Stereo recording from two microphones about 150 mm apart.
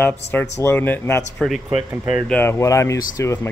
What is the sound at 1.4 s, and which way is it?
Speech, centre (ahead or behind).